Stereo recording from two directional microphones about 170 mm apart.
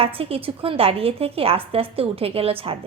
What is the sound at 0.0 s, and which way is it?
Speech, 35° right (ahead or behind).